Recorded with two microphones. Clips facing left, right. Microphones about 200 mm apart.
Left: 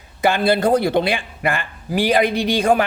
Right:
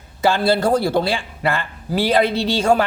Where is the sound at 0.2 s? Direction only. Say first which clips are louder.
Even; 15° left (ahead or behind).